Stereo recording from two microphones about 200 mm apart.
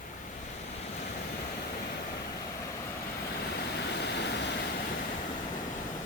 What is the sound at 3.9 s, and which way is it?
Vehicle, 60° left (ahead or behind).